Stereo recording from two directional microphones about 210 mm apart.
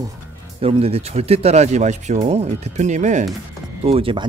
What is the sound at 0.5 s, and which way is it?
Speech, 30° right (ahead or behind).